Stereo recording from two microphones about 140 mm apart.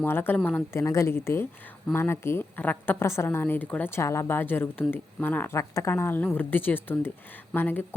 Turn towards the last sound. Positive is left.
turn(degrees=15)  # may be behind; listen again after turning